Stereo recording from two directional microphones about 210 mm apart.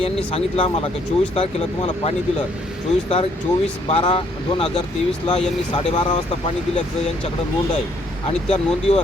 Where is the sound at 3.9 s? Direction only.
25° left (ahead or behind).